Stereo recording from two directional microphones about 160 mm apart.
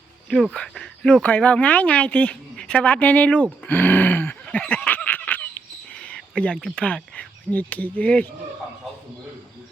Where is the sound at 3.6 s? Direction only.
10° left (ahead or behind).